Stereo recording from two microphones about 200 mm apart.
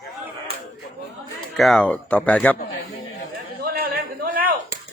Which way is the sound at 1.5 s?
Centre (ahead or behind).